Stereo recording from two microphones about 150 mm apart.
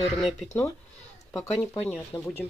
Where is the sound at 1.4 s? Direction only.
15° left (ahead or behind).